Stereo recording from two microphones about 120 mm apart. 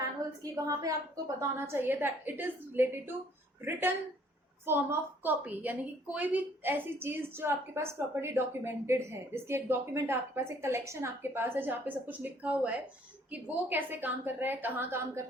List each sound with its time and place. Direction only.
0.4 s a woman's voice: 30° right (ahead or behind)